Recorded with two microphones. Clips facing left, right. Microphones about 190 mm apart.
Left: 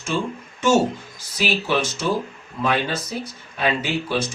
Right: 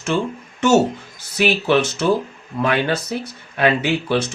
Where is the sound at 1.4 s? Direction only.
65° right (ahead or behind).